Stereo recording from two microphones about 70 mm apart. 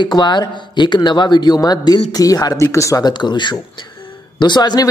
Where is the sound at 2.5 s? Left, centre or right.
Left.